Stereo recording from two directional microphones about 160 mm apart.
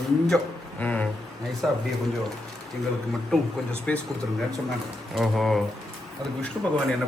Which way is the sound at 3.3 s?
5° left (ahead or behind).